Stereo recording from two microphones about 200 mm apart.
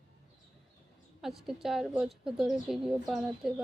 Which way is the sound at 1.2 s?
Centre (ahead or behind).